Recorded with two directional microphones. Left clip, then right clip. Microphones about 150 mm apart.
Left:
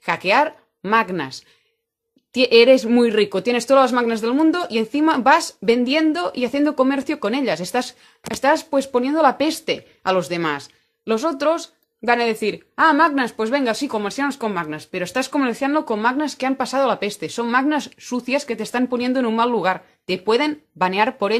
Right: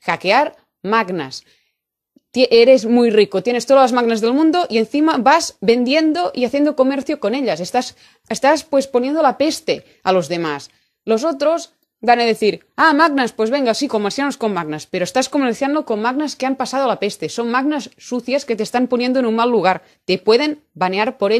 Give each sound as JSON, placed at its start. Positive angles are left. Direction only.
{"t": 0.0, "sound": "speech", "side_deg": -40}
{"t": 2.3, "sound": "speech", "side_deg": -30}
{"t": 8.3, "sound": "speech", "side_deg": -40}
{"t": 9.5, "sound": "a woman's voice", "side_deg": -35}
{"t": 12.1, "sound": "speech", "side_deg": -40}
{"t": 13.4, "sound": "speech", "side_deg": -35}
{"t": 15.7, "sound": "speech", "side_deg": -25}
{"t": 16.1, "sound": "speech", "side_deg": -35}
{"t": 18.5, "sound": "speech", "side_deg": -40}